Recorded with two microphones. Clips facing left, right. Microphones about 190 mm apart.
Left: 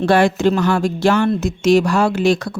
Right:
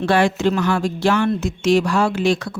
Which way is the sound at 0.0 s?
40° left (ahead or behind).